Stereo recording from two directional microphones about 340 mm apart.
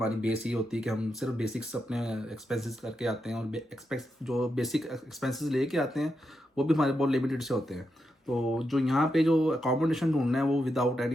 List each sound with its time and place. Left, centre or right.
0.0 s speech: centre